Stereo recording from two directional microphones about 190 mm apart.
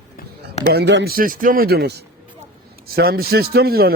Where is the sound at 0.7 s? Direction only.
60° right (ahead or behind).